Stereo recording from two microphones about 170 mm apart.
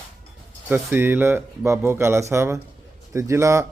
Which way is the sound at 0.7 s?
10° right (ahead or behind).